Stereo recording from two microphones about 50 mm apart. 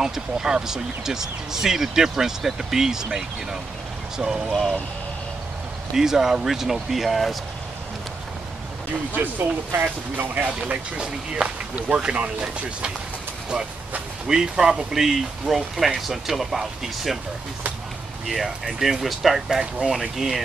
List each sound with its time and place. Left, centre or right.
0.0 s speech: centre
5.9 s speech: centre
9.7 s speech: right
10.6 s speech: centre
14.2 s speech: centre
18.2 s speech: centre